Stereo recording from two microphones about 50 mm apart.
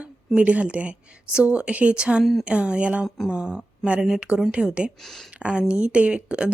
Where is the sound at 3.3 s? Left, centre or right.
Centre.